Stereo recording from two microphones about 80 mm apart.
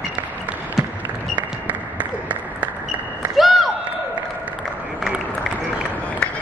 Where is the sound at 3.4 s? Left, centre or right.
Centre.